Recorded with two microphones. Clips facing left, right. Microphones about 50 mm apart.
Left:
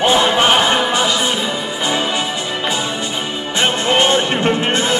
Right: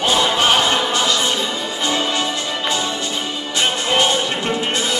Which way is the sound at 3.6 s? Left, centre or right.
Left.